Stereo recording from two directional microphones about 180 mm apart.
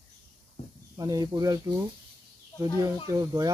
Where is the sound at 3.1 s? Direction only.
20° right (ahead or behind).